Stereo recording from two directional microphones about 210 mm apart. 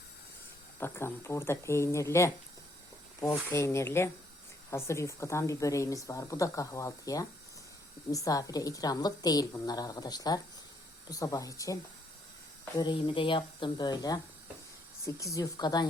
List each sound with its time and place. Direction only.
0.8 s speech: 10° left (ahead or behind)
3.5 s speech: 15° left (ahead or behind)